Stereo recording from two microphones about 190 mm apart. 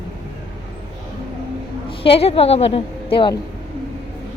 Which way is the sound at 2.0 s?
30° left (ahead or behind).